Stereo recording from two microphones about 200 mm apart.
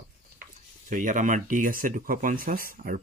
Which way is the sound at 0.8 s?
40° right (ahead or behind).